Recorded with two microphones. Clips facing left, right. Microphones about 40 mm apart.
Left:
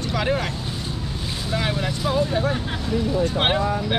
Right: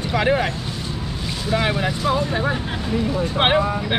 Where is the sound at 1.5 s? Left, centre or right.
Centre.